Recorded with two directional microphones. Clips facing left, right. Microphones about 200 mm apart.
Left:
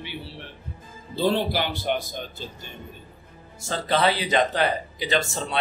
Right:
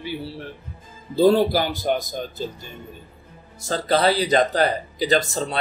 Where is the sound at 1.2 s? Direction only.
40° right (ahead or behind).